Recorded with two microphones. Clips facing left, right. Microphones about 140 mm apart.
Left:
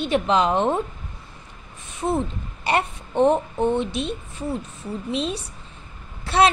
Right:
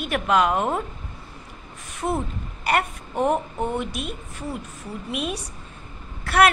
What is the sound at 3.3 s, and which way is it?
Speech, 10° right (ahead or behind).